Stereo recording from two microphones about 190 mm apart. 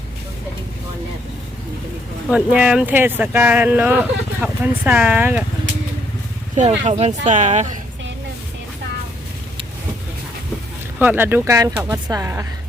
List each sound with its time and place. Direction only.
2.3 s speech: 5° right (ahead or behind)
6.6 s speech: 35° right (ahead or behind)
11.0 s speech: 10° right (ahead or behind)